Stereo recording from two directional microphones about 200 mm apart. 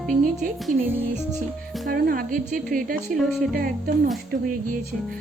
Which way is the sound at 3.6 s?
45° right (ahead or behind).